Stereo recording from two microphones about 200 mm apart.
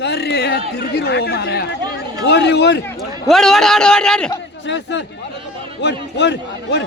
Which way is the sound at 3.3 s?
Centre (ahead or behind).